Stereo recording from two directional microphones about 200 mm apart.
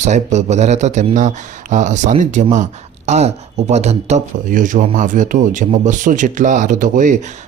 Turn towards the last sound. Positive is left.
turn(degrees=-40)  # may be behind; listen again after turning